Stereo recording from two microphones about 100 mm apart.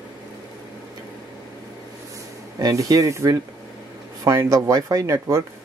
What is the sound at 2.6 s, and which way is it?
Speech, 40° right (ahead or behind).